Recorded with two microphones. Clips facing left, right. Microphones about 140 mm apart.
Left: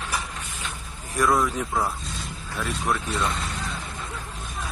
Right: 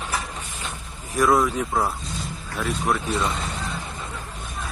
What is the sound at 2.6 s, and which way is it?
Speech, centre (ahead or behind).